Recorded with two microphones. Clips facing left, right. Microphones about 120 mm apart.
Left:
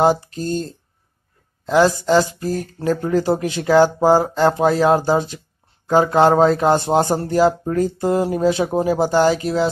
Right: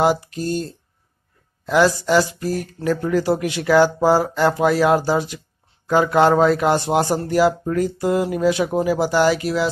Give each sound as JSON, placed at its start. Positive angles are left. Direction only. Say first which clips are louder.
{"t": 0.0, "sound": "speech", "louder": "left 2 dB", "side_deg": 30}